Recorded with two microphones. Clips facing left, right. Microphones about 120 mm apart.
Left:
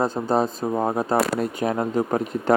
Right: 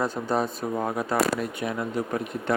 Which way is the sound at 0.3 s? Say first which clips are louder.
Left 4 dB; 30° left (ahead or behind).